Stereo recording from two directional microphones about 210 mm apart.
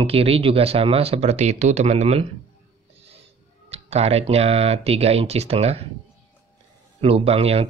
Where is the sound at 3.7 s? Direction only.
30° right (ahead or behind).